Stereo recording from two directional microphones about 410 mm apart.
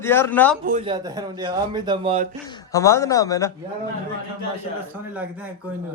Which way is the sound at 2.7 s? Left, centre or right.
Centre.